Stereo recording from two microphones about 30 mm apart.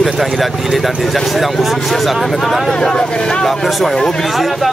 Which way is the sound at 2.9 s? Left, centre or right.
Left.